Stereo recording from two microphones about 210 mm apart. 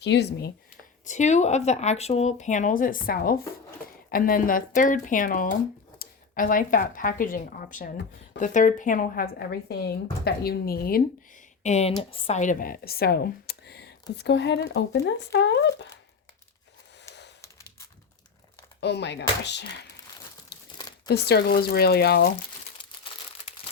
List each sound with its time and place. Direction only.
0.0 s speech: 55° left (ahead or behind)
1.0 s speech: 35° left (ahead or behind)
11.6 s speech: 30° left (ahead or behind); by 15.9 s 55° left (ahead or behind)
17.4 s a sound: 15° left (ahead or behind)
18.8 s speech: 55° left (ahead or behind)
20.5 s crumpling: 55° left (ahead or behind)
21.1 s speech: 50° left (ahead or behind)
22.8 s crumpling: 25° left (ahead or behind)